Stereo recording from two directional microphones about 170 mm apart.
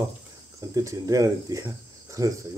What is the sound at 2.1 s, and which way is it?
Cricket, 20° right (ahead or behind).